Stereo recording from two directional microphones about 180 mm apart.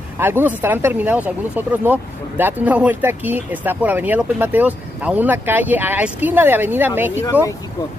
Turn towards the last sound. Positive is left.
turn(degrees=-10)  # may be behind; listen again after turning